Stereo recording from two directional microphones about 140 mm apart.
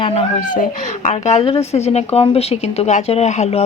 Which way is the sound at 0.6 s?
60° left (ahead or behind).